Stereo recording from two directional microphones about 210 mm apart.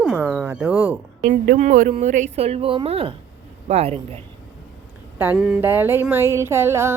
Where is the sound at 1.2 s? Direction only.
40° right (ahead or behind).